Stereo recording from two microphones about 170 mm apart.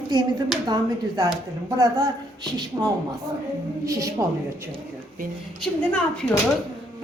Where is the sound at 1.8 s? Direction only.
20° right (ahead or behind).